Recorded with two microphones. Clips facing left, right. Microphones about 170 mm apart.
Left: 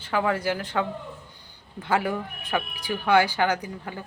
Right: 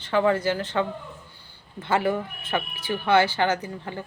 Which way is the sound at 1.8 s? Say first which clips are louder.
Right 2 dB; 15° left (ahead or behind).